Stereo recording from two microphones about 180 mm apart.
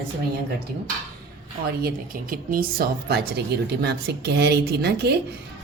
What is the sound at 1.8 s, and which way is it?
A woman's voice, 55° right (ahead or behind).